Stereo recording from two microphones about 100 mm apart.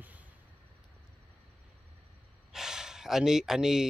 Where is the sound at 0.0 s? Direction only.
15° right (ahead or behind).